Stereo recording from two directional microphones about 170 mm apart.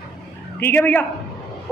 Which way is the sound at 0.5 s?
10° left (ahead or behind).